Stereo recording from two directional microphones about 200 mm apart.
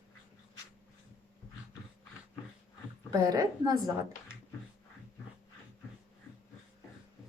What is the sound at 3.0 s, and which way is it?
Speech, 20° right (ahead or behind).